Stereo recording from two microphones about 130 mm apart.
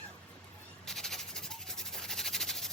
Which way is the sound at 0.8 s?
5° left (ahead or behind).